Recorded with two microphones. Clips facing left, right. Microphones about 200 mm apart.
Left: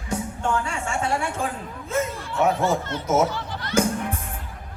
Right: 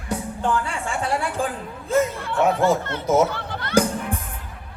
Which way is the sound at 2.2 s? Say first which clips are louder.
Right 2 dB; 60° right (ahead or behind).